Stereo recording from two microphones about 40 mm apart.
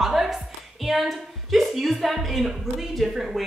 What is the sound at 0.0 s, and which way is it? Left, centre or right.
Music, centre.